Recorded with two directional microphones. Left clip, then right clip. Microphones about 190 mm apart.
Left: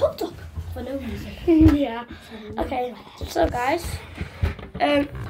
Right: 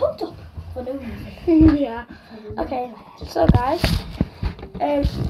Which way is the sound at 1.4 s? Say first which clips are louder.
Right 2 dB; 15° right (ahead or behind).